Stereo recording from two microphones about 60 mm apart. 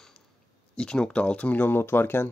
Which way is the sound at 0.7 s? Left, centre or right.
Centre.